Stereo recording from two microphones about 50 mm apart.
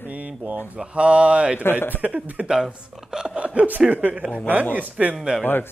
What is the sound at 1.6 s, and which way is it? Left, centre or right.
Speech, left.